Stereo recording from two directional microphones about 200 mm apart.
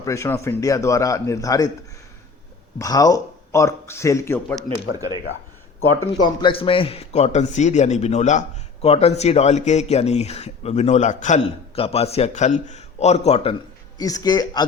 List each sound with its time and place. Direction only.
0.0 s speech: 15° left (ahead or behind)
2.7 s speech: 20° left (ahead or behind)
4.9 s speech: 20° right (ahead or behind)
6.2 s speech: 25° left (ahead or behind)
14.0 s a man's voice: 20° left (ahead or behind)